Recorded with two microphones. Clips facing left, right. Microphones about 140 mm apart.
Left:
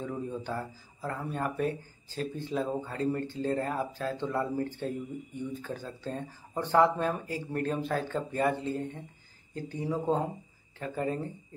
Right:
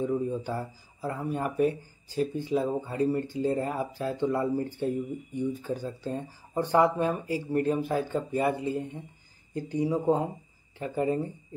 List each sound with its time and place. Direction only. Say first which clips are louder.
0.0 s speech: right 7 dB; 10° right (ahead or behind)